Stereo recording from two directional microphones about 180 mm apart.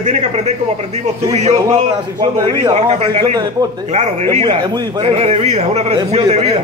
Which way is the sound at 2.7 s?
35° right (ahead or behind).